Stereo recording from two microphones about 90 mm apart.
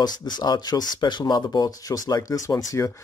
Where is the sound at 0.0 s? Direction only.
50° left (ahead or behind).